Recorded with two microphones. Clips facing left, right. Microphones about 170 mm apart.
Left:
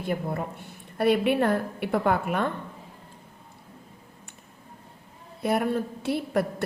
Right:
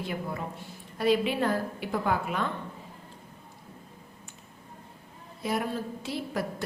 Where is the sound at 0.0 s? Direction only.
55° left (ahead or behind).